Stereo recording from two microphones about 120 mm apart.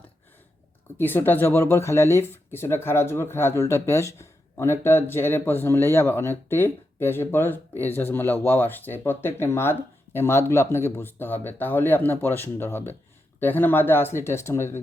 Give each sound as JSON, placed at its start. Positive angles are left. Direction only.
{"t": 0.9, "sound": "speech", "side_deg": 15}